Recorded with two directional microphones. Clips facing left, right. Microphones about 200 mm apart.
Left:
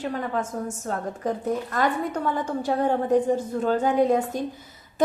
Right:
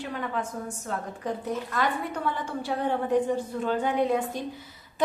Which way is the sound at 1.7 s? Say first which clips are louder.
Left 3 dB; 45° left (ahead or behind).